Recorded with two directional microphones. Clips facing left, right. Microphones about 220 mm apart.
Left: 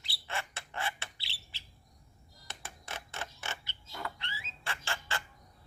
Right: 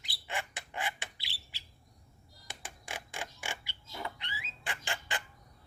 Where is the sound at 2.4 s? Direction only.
15° right (ahead or behind).